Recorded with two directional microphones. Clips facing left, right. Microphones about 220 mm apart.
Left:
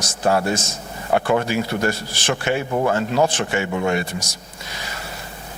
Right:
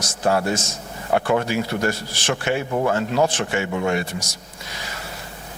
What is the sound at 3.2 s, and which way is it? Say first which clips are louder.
Speech: left 1 dB; 15° left (ahead or behind).